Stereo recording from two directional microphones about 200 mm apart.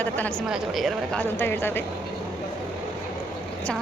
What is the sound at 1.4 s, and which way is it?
Speech, 10° left (ahead or behind).